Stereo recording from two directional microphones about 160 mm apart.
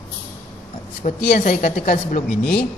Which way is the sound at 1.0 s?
50° left (ahead or behind).